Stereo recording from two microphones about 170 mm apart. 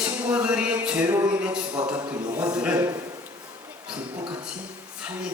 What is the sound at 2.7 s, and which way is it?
Speech, 20° right (ahead or behind).